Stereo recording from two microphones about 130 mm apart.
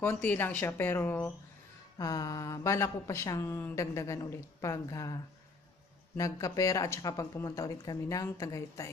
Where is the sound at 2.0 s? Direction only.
25° left (ahead or behind).